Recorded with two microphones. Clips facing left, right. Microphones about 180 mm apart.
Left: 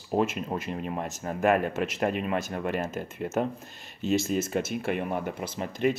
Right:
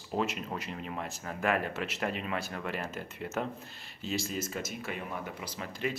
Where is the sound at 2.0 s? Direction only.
50° left (ahead or behind).